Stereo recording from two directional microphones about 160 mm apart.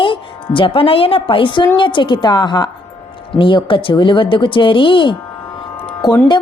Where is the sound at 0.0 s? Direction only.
30° left (ahead or behind).